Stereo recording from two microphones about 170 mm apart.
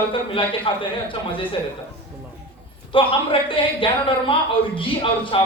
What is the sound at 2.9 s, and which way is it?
A man's voice, 30° left (ahead or behind).